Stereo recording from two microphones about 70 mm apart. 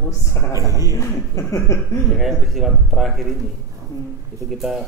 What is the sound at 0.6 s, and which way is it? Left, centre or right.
Speech, right.